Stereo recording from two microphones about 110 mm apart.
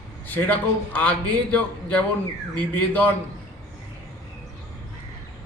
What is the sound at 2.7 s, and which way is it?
Speech, 15° left (ahead or behind).